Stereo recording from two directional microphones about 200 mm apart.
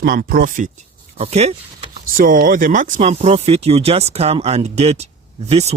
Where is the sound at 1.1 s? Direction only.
30° right (ahead or behind).